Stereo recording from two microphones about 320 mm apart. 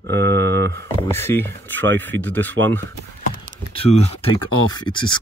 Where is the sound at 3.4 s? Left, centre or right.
Right.